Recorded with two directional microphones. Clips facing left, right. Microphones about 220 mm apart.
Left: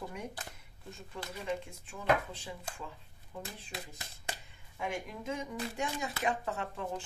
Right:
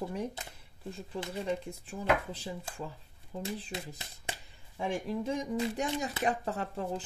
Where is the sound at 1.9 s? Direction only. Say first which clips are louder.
Right 1 dB; 35° right (ahead or behind).